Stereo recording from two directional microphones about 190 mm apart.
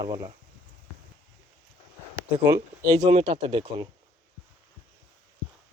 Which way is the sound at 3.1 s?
35° right (ahead or behind).